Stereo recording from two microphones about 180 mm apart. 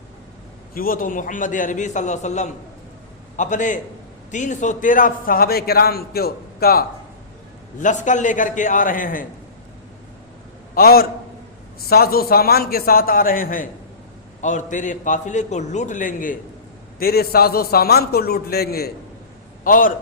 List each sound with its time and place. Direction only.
0.7 s a man's voice: 55° left (ahead or behind)
7.8 s a man's voice: 45° left (ahead or behind)
10.8 s a man's voice: 55° left (ahead or behind)
19.6 s a man's voice: 50° left (ahead or behind)